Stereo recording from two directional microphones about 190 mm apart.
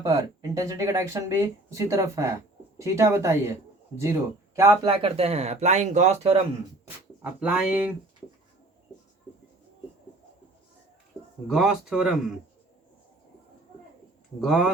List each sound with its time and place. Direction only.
0.0 s speech: 15° right (ahead or behind)
5.0 s speech: 30° right (ahead or behind)
7.2 s speech: 5° right (ahead or behind)
11.4 s speech: 5° right (ahead or behind)
14.4 s speech: centre (ahead or behind)